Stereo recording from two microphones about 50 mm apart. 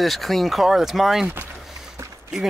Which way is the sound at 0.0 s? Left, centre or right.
Centre.